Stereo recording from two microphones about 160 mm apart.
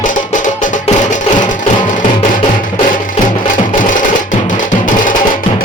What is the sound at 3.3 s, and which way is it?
Music, 55° left (ahead or behind).